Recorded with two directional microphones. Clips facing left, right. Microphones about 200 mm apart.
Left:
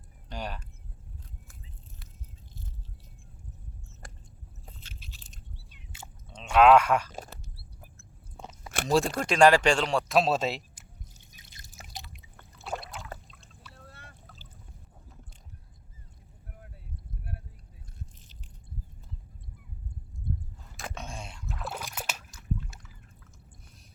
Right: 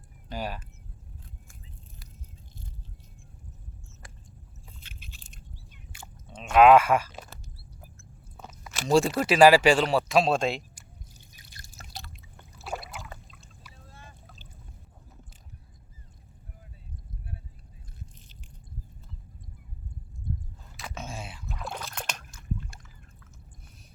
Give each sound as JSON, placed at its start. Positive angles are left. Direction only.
{"t": 0.3, "sound": "speech", "side_deg": -5}
{"t": 4.6, "sound": "biting", "side_deg": 40}
{"t": 5.9, "sound": "chewing", "side_deg": 25}
{"t": 6.3, "sound": "speech", "side_deg": -10}
{"t": 8.4, "sound": "chewing", "side_deg": 30}
{"t": 8.9, "sound": "speech", "side_deg": 0}
{"t": 11.3, "sound": "drip", "side_deg": 20}
{"t": 12.6, "sound": "a sound", "side_deg": -5}
{"t": 13.7, "sound": "goose", "side_deg": 70}
{"t": 20.9, "sound": "rowboat", "side_deg": -5}
{"t": 21.8, "sound": "a sound", "side_deg": 5}